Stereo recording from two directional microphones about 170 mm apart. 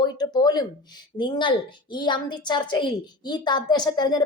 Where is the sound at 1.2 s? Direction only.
30° left (ahead or behind).